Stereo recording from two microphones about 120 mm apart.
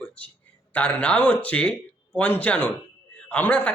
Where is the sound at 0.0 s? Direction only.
10° left (ahead or behind).